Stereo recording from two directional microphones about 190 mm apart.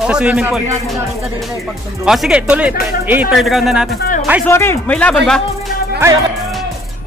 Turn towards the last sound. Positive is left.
turn(degrees=-10)  # may be behind; listen again after turning